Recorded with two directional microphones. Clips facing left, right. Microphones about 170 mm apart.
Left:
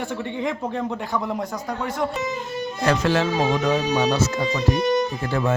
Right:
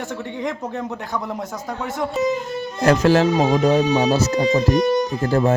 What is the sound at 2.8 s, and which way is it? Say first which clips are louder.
Speech: right 6 dB; 40° right (ahead or behind).